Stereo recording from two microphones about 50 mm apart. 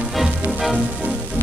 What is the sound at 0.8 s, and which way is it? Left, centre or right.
Music, right.